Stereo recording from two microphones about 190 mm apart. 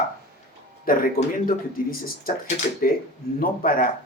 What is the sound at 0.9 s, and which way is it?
Speech, 50° left (ahead or behind).